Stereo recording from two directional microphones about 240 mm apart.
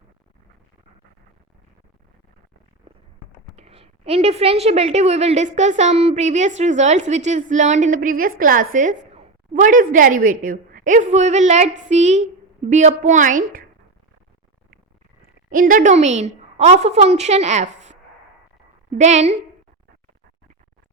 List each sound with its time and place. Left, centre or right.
3.5 s a woman's voice: right
15.4 s a woman's voice: right